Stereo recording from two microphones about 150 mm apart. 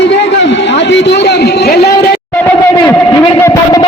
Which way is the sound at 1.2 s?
90° left.